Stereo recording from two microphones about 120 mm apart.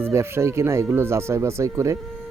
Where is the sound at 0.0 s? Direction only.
20° right (ahead or behind).